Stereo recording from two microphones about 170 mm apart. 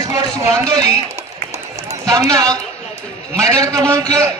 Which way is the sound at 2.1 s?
20° right (ahead or behind).